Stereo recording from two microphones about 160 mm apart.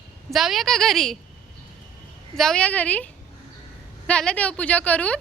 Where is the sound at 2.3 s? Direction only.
5° left (ahead or behind).